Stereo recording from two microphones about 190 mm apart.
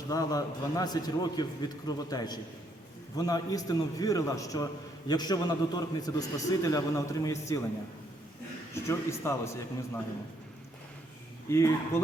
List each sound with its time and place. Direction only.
0.1 s a man's voice: 20° left (ahead or behind)
8.7 s a man's voice: 15° left (ahead or behind)
11.4 s speech: 15° left (ahead or behind)